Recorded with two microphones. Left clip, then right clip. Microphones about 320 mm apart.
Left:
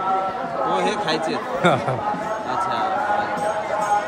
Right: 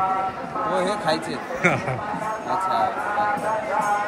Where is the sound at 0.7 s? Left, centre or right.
Centre.